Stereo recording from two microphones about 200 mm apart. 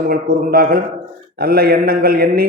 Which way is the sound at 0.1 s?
45° right (ahead or behind).